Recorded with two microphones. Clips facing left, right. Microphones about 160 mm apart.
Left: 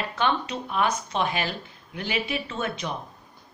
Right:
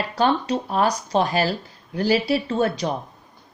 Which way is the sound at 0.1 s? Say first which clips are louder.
Right 7 dB; 35° right (ahead or behind).